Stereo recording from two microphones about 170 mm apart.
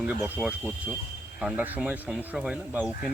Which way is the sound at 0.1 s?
5° right (ahead or behind).